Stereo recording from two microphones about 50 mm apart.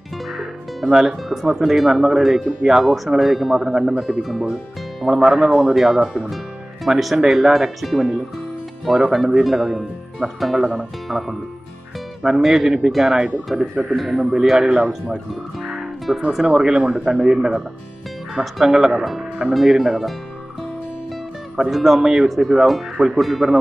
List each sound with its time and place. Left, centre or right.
0.4 s speech: centre
5.0 s speech: centre
5.5 s speech: right
5.8 s speech: centre
15.6 s music: centre
16.4 s speech: centre
21.5 s speech: centre